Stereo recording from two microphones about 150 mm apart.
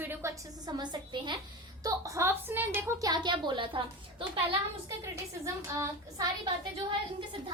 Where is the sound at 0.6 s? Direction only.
30° right (ahead or behind).